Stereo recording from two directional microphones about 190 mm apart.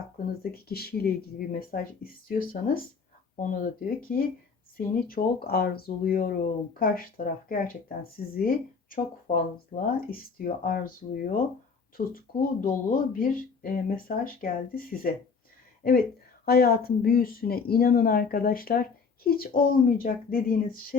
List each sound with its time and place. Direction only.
0.5 s speech: 55° left (ahead or behind)
16.5 s speech: 55° left (ahead or behind)